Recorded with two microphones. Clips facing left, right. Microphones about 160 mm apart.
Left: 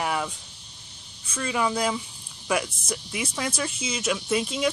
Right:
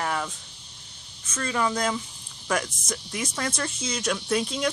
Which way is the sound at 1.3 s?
10° left (ahead or behind).